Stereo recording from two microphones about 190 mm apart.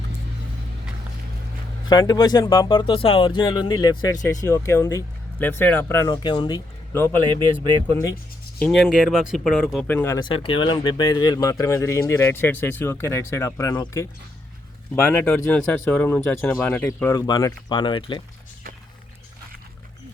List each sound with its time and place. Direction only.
1.9 s speech: 20° left (ahead or behind)
6.9 s speech: 10° left (ahead or behind)
7.3 s speech: 25° right (ahead or behind)
8.5 s speech: 5° left (ahead or behind)
9.8 s speech: 10° left (ahead or behind)
10.2 s speech: 25° left (ahead or behind)